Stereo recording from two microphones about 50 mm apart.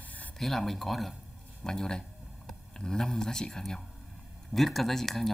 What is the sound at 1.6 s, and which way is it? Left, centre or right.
Speech, centre.